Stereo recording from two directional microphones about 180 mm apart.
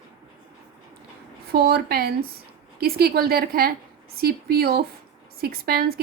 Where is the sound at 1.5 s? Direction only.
60° right (ahead or behind).